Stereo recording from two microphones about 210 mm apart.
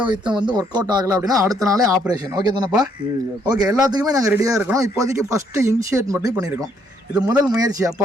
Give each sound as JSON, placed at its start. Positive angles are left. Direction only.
{"t": 0.0, "sound": "speech", "side_deg": -20}